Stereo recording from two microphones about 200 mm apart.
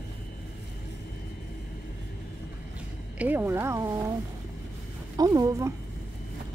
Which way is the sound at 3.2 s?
10° right (ahead or behind).